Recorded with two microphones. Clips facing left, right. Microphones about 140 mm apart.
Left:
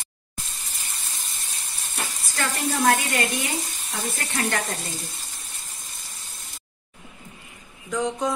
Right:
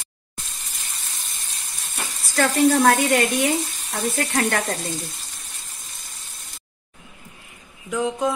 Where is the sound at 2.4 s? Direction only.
60° right (ahead or behind).